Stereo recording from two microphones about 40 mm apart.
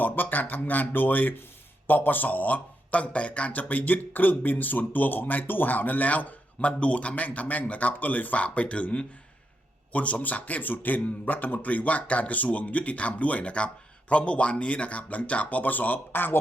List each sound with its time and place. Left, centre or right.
0.0 s a man's voice: left